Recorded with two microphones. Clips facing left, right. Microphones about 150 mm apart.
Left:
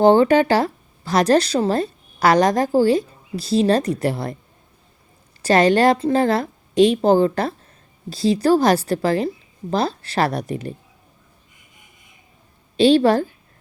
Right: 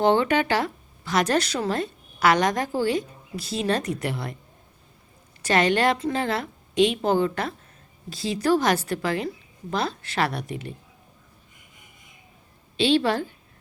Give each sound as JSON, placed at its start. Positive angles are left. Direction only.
{"t": 0.0, "sound": "speech", "side_deg": 35}
{"t": 5.4, "sound": "speech", "side_deg": 35}
{"t": 12.7, "sound": "speech", "side_deg": 40}